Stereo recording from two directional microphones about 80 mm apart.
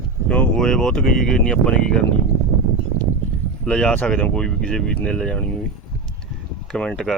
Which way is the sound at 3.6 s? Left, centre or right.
Centre.